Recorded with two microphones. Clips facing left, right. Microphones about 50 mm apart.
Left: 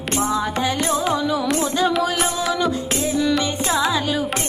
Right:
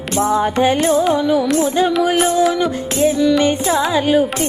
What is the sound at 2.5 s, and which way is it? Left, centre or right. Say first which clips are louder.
Music: right 3 dB; right.